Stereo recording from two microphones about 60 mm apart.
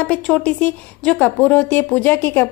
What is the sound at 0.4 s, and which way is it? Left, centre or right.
A woman's voice, left.